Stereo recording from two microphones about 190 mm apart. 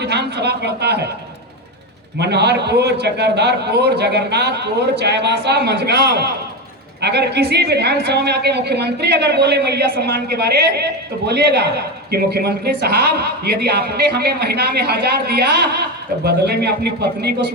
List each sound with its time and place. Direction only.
0.0 s a man's voice: 60° right (ahead or behind)
2.1 s a man's voice: 60° right (ahead or behind)